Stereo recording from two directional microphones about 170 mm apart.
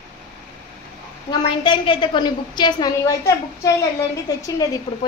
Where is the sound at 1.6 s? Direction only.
30° left (ahead or behind).